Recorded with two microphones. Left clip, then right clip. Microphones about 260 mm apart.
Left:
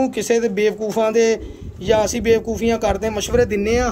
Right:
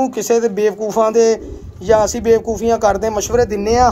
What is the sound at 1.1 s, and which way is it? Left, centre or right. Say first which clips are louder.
A man's voice: right 4 dB; right.